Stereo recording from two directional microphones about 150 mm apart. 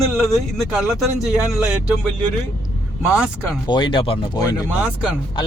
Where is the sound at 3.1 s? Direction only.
5° right (ahead or behind).